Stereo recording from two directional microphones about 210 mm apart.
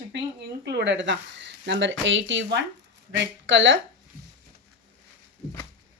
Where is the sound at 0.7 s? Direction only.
55° right (ahead or behind).